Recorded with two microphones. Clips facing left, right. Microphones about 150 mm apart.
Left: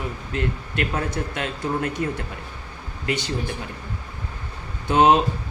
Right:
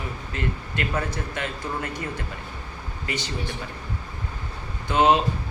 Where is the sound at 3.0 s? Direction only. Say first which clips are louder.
Left 5 dB; 60° left (ahead or behind).